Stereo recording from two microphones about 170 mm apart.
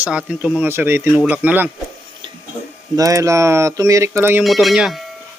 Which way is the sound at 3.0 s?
20° right (ahead or behind).